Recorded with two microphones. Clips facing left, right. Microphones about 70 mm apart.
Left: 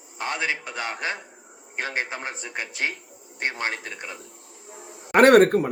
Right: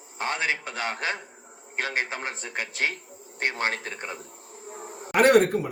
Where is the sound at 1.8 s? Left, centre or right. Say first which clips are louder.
Even; left.